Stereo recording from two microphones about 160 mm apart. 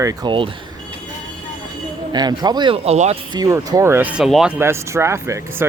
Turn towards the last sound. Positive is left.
turn(degrees=-15)  # may be behind; listen again after turning